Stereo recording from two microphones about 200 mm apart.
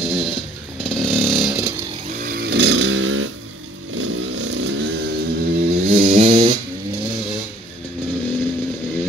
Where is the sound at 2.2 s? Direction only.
50° right (ahead or behind).